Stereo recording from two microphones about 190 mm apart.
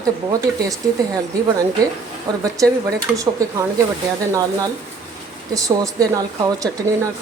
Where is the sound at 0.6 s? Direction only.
20° right (ahead or behind).